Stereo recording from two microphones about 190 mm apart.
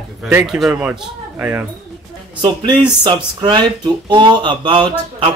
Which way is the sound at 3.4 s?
25° right (ahead or behind).